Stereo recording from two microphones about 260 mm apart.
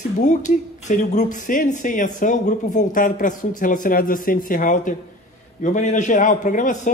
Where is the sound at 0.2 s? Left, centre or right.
Left.